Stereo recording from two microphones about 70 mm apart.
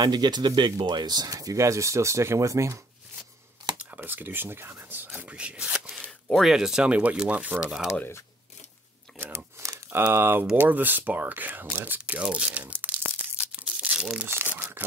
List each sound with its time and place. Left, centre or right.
0.0 s speech: right
3.9 s speech: right; by 5.9 s centre
5.9 s camera: centre
6.4 s speech: centre
10.1 s speech: right
12.2 s speech: centre
13.4 s tearing: centre
14.2 s crumpling: right